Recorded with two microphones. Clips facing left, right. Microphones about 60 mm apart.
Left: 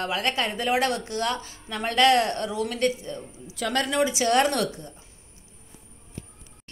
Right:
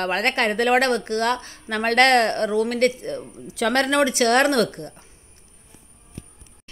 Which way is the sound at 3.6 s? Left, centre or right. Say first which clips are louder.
Right 5 dB; right.